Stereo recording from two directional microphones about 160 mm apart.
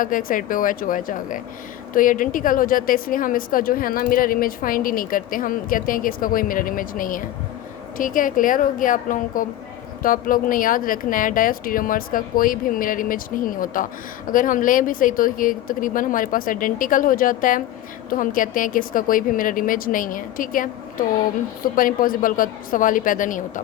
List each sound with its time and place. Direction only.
0.0 s a woman's voice: 60° left (ahead or behind)